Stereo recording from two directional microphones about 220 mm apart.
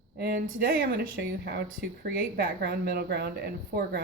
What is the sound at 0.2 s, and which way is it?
Speech, 45° right (ahead or behind).